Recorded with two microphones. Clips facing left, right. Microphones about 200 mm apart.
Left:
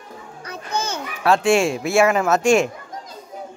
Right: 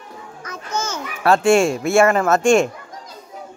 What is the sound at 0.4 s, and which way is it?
Babbling, 35° left (ahead or behind).